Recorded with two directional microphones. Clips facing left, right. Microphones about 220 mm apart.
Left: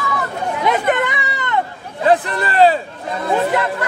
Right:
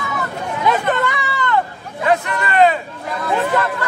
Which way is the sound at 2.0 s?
30° left (ahead or behind).